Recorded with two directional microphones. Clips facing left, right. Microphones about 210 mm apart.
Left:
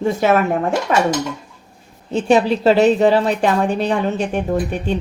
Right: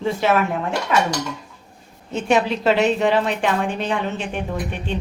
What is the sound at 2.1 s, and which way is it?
A woman's voice, 35° left (ahead or behind).